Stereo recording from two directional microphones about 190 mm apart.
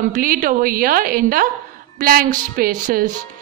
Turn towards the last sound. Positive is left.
turn(degrees=-50)  # may be behind; listen again after turning